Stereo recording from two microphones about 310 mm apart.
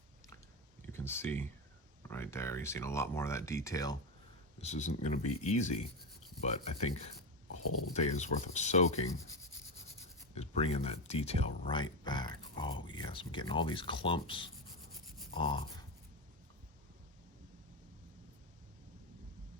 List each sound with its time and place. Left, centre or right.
0.8 s a sound: centre
2.0 s speech: centre
4.6 s speech: left
10.3 s speech: centre